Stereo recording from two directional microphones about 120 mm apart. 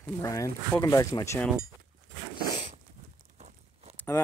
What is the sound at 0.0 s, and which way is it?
Speech, 30° left (ahead or behind).